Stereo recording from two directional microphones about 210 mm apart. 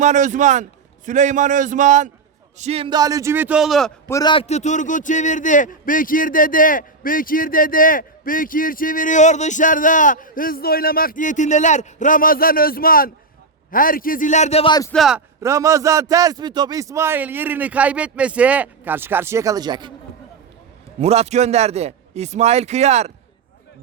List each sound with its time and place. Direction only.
0.0 s a man's voice: 35° right (ahead or behind); by 3.9 s centre (ahead or behind)
4.1 s a man's voice: 20° left (ahead or behind)
14.9 s a man's voice: centre (ahead or behind)
15.4 s a man's voice: 15° right (ahead or behind)
21.0 s a man's voice: 30° right (ahead or behind)